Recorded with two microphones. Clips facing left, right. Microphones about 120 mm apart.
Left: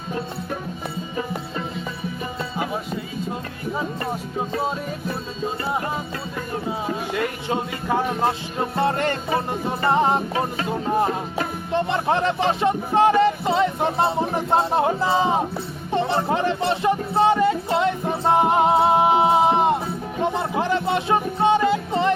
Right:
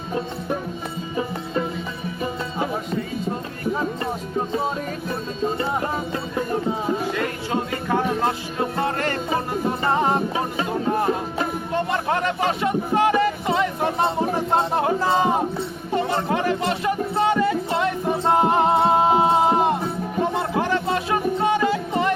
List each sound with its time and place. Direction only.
7.1 s music: 15° left (ahead or behind)
8.8 s speech: 25° left (ahead or behind)
9.9 s music: 20° left (ahead or behind)
11.7 s a sound: 25° left (ahead or behind)
16.0 s music: 25° left (ahead or behind)